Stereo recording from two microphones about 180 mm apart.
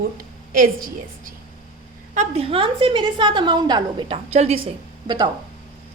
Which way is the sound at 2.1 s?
40° right (ahead or behind).